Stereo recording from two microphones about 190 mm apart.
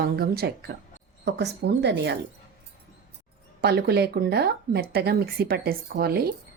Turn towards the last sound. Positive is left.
turn(degrees=-55)  # may be behind; listen again after turning